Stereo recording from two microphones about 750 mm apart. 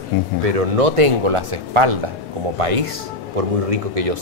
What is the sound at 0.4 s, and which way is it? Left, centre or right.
Speech, right.